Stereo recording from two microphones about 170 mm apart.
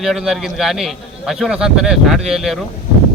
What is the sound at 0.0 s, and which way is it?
Speech, centre (ahead or behind).